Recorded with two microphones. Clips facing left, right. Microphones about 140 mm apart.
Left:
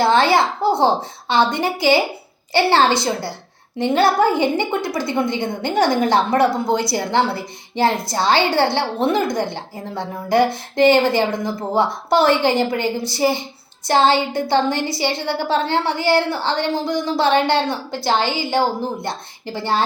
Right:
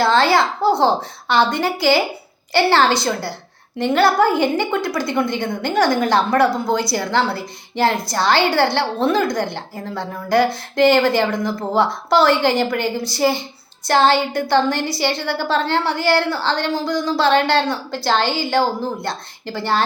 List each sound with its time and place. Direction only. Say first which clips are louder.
0.0 s a woman's voice: even; 20° left (ahead or behind)